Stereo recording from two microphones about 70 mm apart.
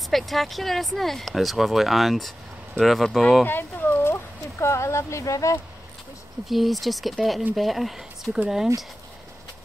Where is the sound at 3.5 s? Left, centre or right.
Left.